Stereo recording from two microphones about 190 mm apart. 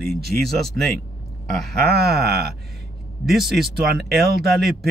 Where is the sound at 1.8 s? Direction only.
55° right (ahead or behind).